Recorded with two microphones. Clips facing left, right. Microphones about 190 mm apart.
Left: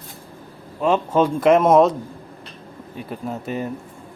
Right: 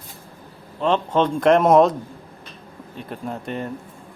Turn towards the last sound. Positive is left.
turn(degrees=5)  # may be behind; listen again after turning